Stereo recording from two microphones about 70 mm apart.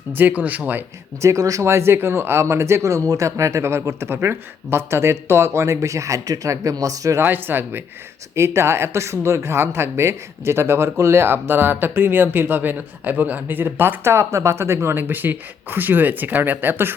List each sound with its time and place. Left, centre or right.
0.1 s speech: right
1.2 s speech: right
7.2 s speech: right